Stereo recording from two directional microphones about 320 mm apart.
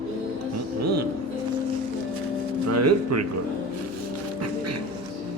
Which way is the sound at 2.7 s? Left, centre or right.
Right.